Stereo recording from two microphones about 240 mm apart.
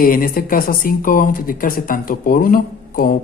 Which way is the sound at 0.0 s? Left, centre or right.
Left.